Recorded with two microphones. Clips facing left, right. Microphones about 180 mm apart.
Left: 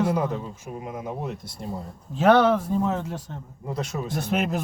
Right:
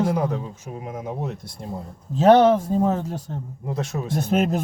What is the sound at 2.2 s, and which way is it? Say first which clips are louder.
Speech: right 4 dB; 35° right (ahead or behind).